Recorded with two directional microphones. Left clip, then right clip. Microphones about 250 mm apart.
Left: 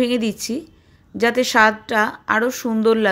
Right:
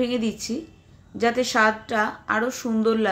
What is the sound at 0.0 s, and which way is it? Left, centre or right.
Speech, left.